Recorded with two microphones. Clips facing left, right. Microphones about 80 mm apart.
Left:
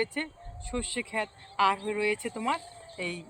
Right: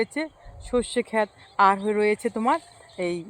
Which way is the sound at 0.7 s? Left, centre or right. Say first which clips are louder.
Right 11 dB; right.